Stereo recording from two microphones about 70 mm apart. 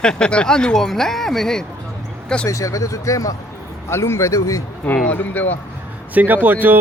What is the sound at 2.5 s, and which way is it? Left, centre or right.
Speech, left.